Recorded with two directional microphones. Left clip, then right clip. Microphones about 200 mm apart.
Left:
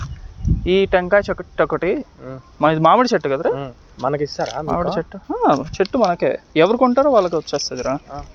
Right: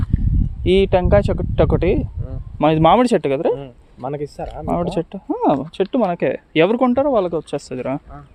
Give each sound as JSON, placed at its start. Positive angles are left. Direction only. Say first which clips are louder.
{"t": 0.6, "sound": "speech", "louder": "right 1 dB", "side_deg": -60}
{"t": 3.5, "sound": "speech", "louder": "even", "side_deg": -25}
{"t": 4.8, "sound": "speech", "louder": "left 1 dB", "side_deg": -60}
{"t": 5.3, "sound": "speech", "louder": "left 2 dB", "side_deg": -40}
{"t": 7.5, "sound": "speech", "louder": "left 2 dB", "side_deg": -55}